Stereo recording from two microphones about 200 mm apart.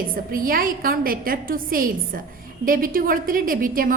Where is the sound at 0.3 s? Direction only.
45° right (ahead or behind).